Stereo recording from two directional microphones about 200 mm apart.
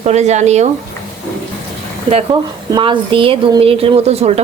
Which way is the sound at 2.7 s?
25° right (ahead or behind).